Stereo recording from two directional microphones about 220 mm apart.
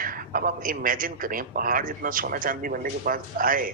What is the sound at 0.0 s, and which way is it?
A man's voice, 40° right (ahead or behind).